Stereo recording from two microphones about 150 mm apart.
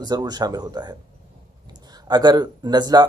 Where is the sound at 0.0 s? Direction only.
25° right (ahead or behind).